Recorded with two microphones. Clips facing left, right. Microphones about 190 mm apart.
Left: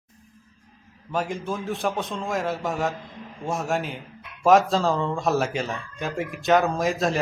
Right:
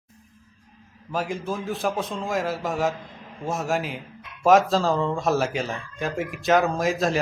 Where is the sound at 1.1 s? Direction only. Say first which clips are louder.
Even; centre (ahead or behind).